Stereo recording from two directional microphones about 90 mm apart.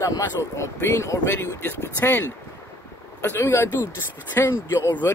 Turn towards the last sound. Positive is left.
turn(degrees=30)  # may be behind; listen again after turning